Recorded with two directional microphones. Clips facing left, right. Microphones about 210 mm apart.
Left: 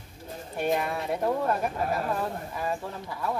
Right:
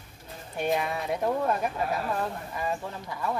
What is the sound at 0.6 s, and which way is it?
Speech, centre (ahead or behind).